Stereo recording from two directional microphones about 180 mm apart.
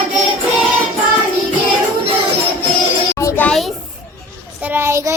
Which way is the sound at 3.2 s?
15° left (ahead or behind).